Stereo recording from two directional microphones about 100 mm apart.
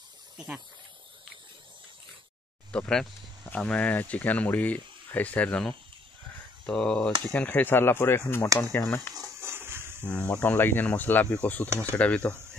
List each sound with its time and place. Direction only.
2.7 s speech: 10° left (ahead or behind); by 9.0 s 25° left (ahead or behind)
9.4 s a sound: 25° right (ahead or behind)
10.0 s speech: 15° left (ahead or behind)